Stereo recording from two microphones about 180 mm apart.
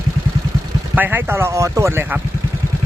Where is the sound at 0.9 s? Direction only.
10° right (ahead or behind).